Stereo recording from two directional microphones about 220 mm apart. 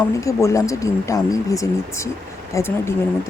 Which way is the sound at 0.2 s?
15° left (ahead or behind).